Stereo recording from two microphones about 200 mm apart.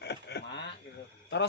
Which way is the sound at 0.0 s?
55° left (ahead or behind).